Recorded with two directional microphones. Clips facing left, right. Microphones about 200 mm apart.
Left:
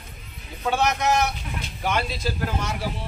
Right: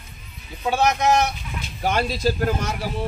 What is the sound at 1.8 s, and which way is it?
Speech, 35° right (ahead or behind).